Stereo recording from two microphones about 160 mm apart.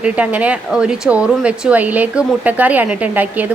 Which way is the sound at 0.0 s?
10° right (ahead or behind).